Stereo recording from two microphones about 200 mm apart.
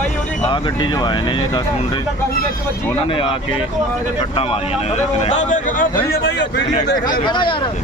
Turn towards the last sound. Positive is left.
turn(degrees=25)  # may be behind; listen again after turning